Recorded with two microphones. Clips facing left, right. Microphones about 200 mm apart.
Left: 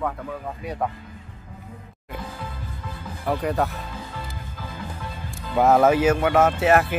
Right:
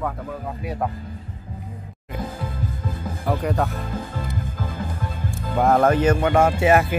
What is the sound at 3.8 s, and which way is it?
Music, 50° right (ahead or behind).